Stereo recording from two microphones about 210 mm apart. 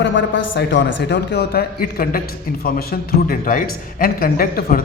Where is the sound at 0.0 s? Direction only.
60° left (ahead or behind).